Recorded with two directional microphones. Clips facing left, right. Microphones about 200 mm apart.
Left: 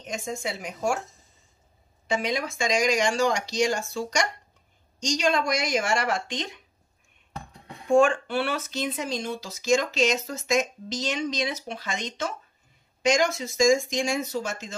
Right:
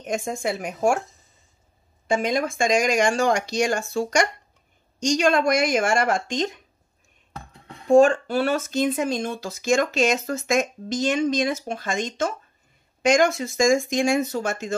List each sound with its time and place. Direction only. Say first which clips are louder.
0.0 s speech: right 6 dB; 55° right (ahead or behind)
2.0 s speech: right 5 dB; 50° right (ahead or behind)
7.9 s speech: right 5 dB; 40° right (ahead or behind); by 14.8 s 55° right (ahead or behind)